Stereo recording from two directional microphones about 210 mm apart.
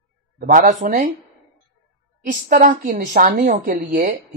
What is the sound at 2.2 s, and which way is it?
Speech, 40° right (ahead or behind).